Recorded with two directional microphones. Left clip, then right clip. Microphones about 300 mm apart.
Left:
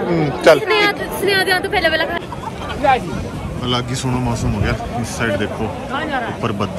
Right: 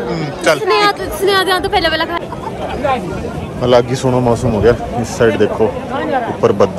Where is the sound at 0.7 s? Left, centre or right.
Right.